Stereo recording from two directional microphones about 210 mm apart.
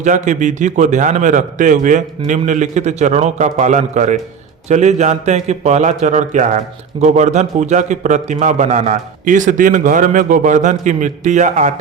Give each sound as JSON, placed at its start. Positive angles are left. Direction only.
{"t": 0.0, "sound": "a man's voice", "side_deg": -35}